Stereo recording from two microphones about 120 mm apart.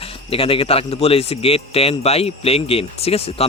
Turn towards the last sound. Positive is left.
turn(degrees=55)  # may be behind; listen again after turning